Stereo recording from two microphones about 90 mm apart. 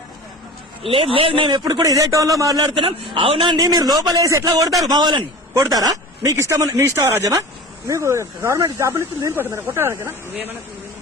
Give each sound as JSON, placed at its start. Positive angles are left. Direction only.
{"t": 0.8, "sound": "speech", "side_deg": -90}
{"t": 1.8, "sound": "speech", "side_deg": -40}
{"t": 2.7, "sound": "a man's voice", "side_deg": -75}
{"t": 3.5, "sound": "a man's voice", "side_deg": -45}